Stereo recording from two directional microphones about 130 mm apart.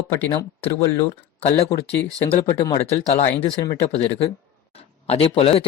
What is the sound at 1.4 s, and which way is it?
Speech, 55° left (ahead or behind).